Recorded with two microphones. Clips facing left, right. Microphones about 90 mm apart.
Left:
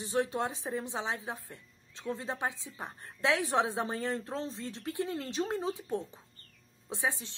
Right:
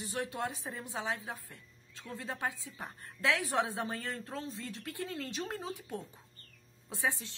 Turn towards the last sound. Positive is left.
turn(degrees=20)  # may be behind; listen again after turning